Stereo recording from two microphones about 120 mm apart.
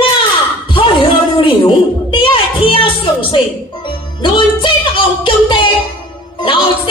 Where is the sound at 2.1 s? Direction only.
45° left (ahead or behind).